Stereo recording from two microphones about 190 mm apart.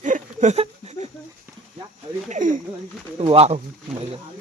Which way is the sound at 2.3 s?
40° right (ahead or behind).